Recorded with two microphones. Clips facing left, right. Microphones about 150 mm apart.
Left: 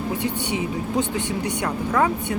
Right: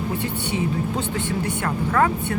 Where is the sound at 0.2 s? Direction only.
15° left (ahead or behind).